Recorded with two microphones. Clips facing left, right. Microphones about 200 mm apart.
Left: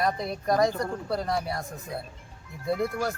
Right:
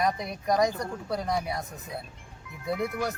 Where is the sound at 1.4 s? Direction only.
20° right (ahead or behind).